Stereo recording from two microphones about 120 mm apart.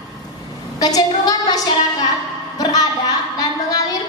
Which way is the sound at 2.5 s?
30° left (ahead or behind).